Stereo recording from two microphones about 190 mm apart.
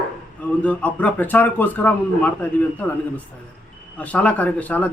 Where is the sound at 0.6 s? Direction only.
5° left (ahead or behind).